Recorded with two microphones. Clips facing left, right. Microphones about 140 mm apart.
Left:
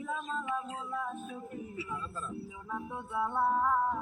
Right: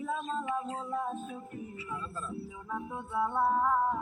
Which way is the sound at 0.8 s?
25° right (ahead or behind).